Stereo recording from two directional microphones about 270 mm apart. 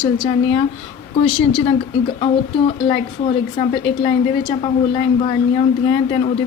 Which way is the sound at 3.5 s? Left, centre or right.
Centre.